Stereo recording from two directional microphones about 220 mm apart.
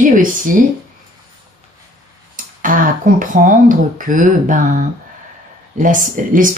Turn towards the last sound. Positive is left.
turn(degrees=-40)  # may be behind; listen again after turning